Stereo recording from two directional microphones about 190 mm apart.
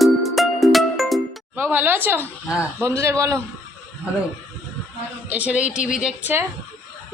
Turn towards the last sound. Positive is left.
turn(degrees=-10)  # may be behind; listen again after turning